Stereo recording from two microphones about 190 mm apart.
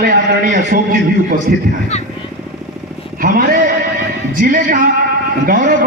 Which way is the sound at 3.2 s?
50° right (ahead or behind).